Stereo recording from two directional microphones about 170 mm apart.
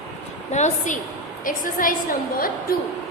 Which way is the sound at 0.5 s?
45° left (ahead or behind).